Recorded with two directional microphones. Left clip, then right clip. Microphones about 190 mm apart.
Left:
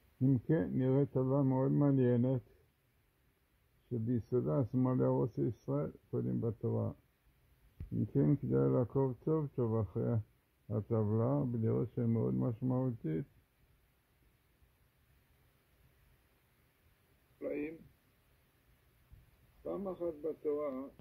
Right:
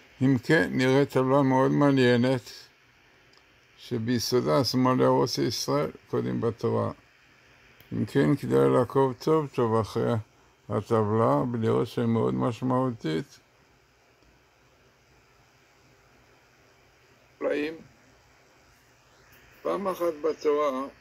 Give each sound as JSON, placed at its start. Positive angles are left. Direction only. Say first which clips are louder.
{"t": 0.2, "sound": "speech", "louder": "right 11 dB", "side_deg": -15}
{"t": 4.1, "sound": "speech", "louder": "right 11 dB", "side_deg": -15}
{"t": 8.1, "sound": "a man's voice", "louder": "right 10 dB", "side_deg": -10}
{"t": 17.4, "sound": "a man's voice", "louder": "right 12 dB", "side_deg": -35}
{"t": 19.6, "sound": "a man's voice", "louder": "right 12 dB", "side_deg": -25}